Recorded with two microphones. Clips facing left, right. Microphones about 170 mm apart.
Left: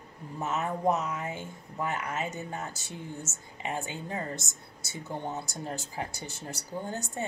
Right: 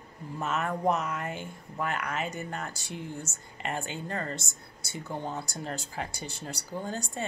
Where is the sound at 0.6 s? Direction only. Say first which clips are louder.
Left 1 dB; 20° left (ahead or behind).